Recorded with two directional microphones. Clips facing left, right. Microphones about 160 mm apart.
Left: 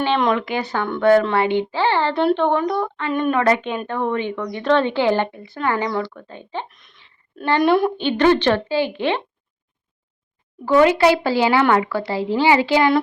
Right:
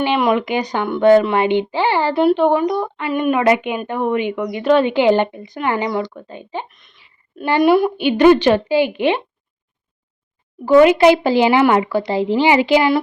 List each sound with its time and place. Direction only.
0.0 s a woman's voice: 10° right (ahead or behind)
6.7 s a woman's voice: centre (ahead or behind)
10.7 s a woman's voice: 15° right (ahead or behind)